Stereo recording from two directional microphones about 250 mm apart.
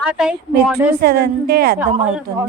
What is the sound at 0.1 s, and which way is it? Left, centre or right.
Speech, centre.